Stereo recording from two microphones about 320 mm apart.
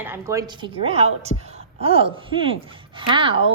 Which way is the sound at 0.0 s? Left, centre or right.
Centre.